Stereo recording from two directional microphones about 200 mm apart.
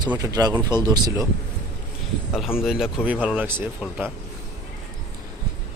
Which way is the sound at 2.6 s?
Centre (ahead or behind).